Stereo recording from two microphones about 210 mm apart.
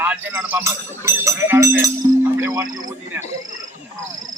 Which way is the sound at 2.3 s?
15° right (ahead or behind).